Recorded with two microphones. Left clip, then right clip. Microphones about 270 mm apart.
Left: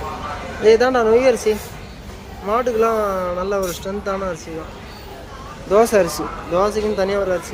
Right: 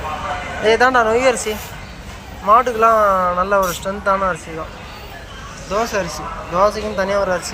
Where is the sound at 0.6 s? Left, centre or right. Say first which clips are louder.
Even; centre.